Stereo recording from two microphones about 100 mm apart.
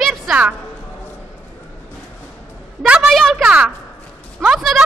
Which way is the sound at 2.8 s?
5° right (ahead or behind).